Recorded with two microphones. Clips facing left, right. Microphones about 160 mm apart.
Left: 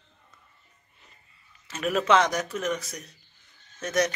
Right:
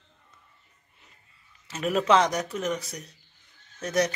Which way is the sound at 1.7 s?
25° right (ahead or behind).